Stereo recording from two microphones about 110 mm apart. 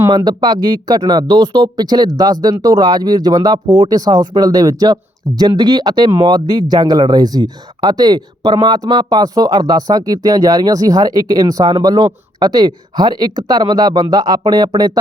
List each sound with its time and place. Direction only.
0.3 s speech: 40° right (ahead or behind)